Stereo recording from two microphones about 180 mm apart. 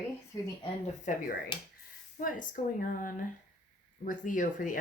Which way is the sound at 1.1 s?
45° left (ahead or behind).